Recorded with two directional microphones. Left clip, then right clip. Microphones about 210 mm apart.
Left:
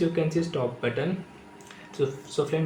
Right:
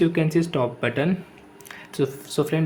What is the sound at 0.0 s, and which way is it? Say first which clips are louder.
Speech: right 4 dB; 55° right (ahead or behind).